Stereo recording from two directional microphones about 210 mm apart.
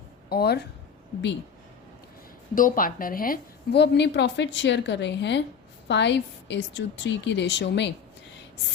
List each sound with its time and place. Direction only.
0.3 s speech: 50° left (ahead or behind)
2.6 s a woman's voice: 40° left (ahead or behind)